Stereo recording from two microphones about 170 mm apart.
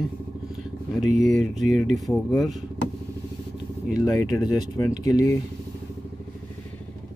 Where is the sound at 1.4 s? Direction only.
Centre (ahead or behind).